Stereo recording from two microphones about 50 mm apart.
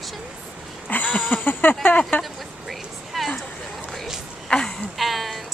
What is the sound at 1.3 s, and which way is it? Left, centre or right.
Speech, left.